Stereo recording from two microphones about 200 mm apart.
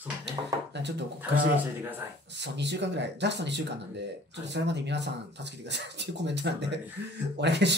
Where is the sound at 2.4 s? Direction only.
60° right (ahead or behind).